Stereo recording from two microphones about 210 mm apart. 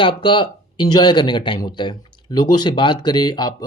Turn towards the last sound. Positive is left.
turn(degrees=20)  # may be behind; listen again after turning